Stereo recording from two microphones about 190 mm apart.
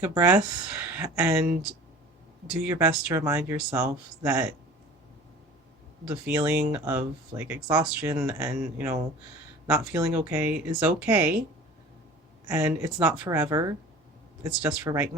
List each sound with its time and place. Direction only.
0.0 s speech: 10° right (ahead or behind)
6.1 s speech: 10° right (ahead or behind)
12.5 s speech: 10° right (ahead or behind)
14.5 s speech: 5° right (ahead or behind)